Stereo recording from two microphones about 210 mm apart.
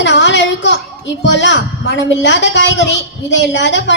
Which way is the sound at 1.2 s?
60° left (ahead or behind).